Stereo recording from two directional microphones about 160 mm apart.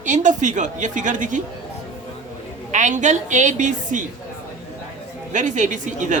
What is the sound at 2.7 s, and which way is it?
A woman's voice, 50° right (ahead or behind).